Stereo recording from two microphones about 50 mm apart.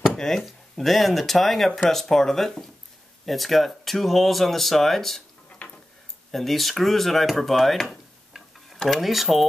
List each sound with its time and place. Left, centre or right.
0.1 s a sound: centre
0.4 s speech: centre
5.6 s tick-tock: left
6.3 s speech: centre